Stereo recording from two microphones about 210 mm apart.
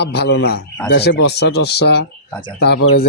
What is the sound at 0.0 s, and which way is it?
A man's voice, 50° left (ahead or behind).